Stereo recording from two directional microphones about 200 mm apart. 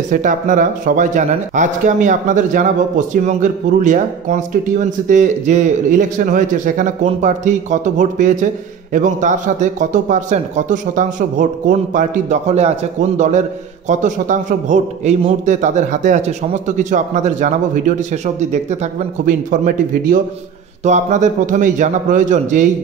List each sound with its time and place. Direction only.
0.1 s speech: 40° right (ahead or behind)
13.8 s speech: 40° right (ahead or behind)